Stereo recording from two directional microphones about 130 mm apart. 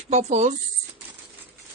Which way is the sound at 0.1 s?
60° right (ahead or behind).